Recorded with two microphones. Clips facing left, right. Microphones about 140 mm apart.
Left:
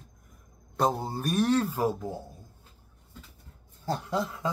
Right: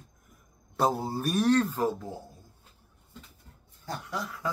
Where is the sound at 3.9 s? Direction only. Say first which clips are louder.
Left 6 dB; 25° left (ahead or behind).